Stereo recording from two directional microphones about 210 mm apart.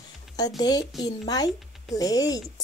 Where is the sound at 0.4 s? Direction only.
20° left (ahead or behind).